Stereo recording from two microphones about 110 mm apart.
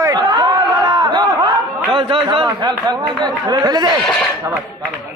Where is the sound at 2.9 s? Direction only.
40° right (ahead or behind).